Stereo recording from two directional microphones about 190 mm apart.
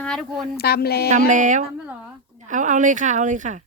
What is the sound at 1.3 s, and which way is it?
Speech, 40° right (ahead or behind).